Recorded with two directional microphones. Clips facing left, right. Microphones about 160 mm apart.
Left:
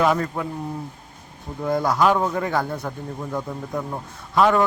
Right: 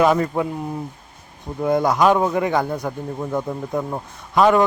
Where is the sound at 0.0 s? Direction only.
20° right (ahead or behind).